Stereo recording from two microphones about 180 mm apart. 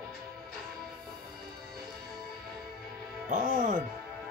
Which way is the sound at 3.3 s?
45° right (ahead or behind).